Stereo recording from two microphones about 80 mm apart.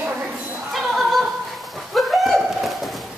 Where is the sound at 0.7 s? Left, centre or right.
Centre.